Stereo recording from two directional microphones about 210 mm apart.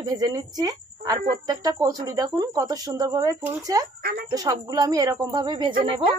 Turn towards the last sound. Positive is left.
turn(degrees=-20)  # may be behind; listen again after turning